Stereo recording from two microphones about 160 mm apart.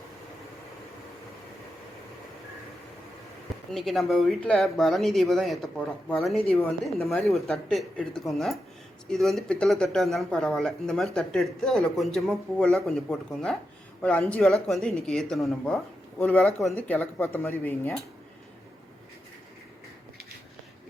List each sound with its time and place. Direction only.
3.7 s speech: centre (ahead or behind)